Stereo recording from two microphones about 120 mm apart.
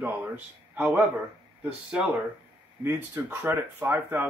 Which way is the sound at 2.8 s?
20° right (ahead or behind).